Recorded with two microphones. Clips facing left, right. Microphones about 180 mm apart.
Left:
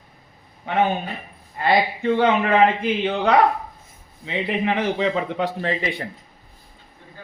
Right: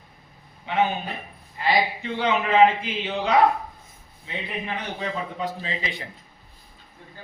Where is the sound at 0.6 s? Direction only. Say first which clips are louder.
Left 3 dB; 50° left (ahead or behind).